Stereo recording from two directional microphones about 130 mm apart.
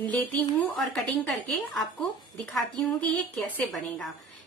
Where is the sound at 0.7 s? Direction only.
5° left (ahead or behind).